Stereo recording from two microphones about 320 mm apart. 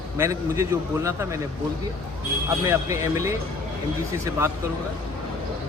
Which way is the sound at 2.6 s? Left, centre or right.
Centre.